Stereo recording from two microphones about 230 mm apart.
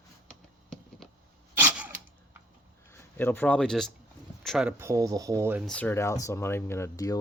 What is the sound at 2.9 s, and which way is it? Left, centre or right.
Speech, centre.